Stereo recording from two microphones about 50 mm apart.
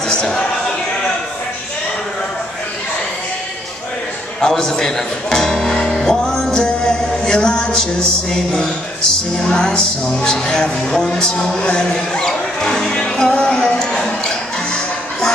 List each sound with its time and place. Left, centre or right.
0.1 s speech: centre
4.4 s speech: centre